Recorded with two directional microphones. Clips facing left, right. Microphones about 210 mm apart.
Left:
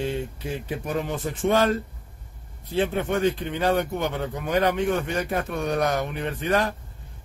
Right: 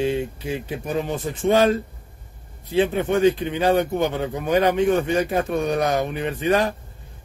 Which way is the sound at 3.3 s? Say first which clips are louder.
Right 4 dB; 15° right (ahead or behind).